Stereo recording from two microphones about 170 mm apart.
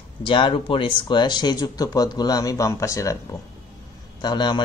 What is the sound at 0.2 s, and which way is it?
Speech, 30° left (ahead or behind).